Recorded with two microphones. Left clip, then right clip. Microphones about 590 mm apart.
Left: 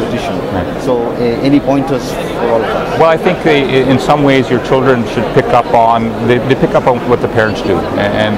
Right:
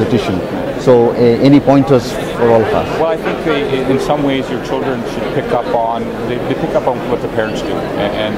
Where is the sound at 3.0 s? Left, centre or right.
Left.